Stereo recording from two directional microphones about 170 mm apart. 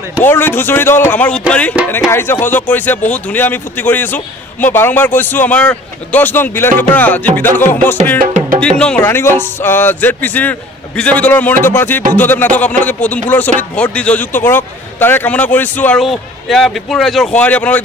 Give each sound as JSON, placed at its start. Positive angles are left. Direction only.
{"t": 0.2, "sound": "speech", "side_deg": 15}
{"t": 8.2, "sound": "music", "side_deg": -55}
{"t": 8.5, "sound": "speech", "side_deg": 5}